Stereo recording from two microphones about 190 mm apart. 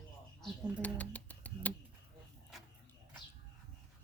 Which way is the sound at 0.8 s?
5° left (ahead or behind).